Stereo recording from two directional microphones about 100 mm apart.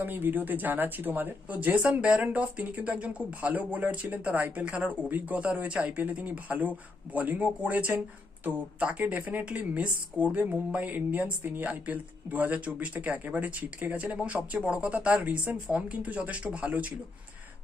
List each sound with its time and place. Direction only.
0.0 s speech: 20° right (ahead or behind)